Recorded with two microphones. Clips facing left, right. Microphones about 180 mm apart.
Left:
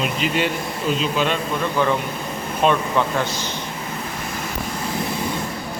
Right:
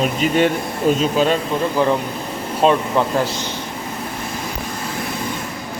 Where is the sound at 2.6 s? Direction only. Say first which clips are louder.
Right 3 dB; 35° right (ahead or behind).